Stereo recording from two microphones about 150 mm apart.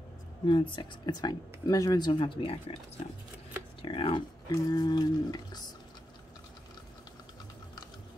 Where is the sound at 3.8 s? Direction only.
35° left (ahead or behind).